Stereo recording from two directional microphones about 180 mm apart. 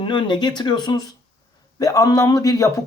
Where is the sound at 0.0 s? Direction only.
25° left (ahead or behind).